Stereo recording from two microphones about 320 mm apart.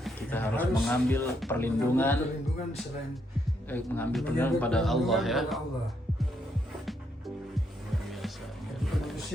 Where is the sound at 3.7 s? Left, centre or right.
Centre.